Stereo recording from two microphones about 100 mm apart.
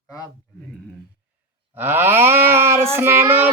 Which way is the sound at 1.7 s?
20° right (ahead or behind).